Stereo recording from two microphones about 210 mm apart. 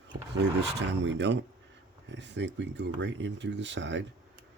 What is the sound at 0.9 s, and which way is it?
Speech, 55° right (ahead or behind).